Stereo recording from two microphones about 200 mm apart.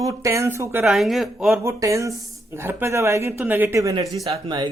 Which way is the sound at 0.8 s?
Centre (ahead or behind).